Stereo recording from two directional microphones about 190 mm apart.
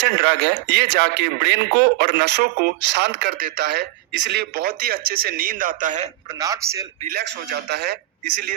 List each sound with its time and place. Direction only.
0.0 s speech: 60° right (ahead or behind); by 6.1 s 40° right (ahead or behind)
6.2 s a man's voice: 20° right (ahead or behind)
7.1 s speech: 60° right (ahead or behind)